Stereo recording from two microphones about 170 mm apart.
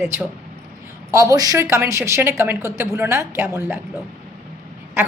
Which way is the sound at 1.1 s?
20° right (ahead or behind).